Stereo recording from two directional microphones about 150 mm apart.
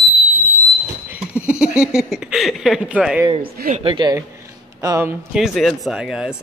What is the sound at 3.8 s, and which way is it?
Speech, 35° right (ahead or behind).